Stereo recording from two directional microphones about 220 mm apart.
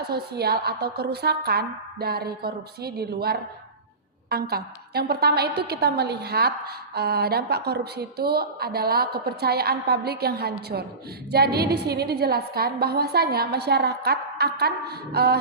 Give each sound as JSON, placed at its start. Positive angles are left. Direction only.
{"t": 0.0, "sound": "a woman's voice", "side_deg": -45}